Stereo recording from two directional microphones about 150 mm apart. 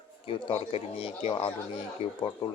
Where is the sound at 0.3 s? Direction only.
35° left (ahead or behind).